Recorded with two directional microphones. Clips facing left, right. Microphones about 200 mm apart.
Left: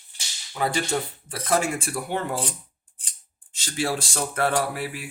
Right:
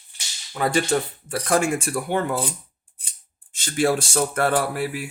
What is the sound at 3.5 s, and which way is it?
Speech, 50° right (ahead or behind).